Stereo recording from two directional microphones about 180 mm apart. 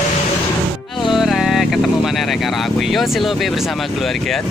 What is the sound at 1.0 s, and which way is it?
Speech, centre (ahead or behind).